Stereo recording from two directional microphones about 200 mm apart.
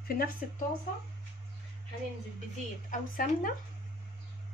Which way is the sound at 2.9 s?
45° left (ahead or behind).